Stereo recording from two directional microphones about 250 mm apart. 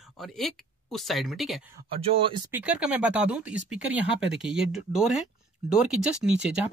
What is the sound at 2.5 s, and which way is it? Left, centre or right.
Speech, centre.